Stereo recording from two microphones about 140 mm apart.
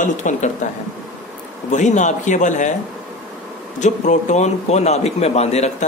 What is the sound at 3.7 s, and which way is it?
A man's voice, 60° left (ahead or behind).